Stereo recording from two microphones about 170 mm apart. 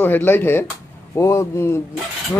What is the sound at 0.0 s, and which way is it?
Speech, 10° left (ahead or behind).